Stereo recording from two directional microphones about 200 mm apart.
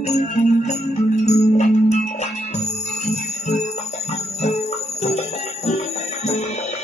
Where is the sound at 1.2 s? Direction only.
35° left (ahead or behind).